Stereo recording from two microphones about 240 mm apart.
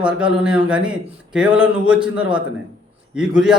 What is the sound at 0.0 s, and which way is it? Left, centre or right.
A man's voice, centre.